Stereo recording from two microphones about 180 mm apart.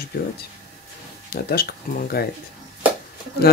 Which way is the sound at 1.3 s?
60° left (ahead or behind).